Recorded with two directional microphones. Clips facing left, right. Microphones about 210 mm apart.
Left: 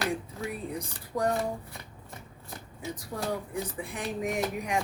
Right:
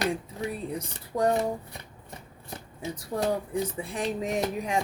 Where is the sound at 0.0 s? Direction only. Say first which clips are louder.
Right 3 dB; 20° right (ahead or behind).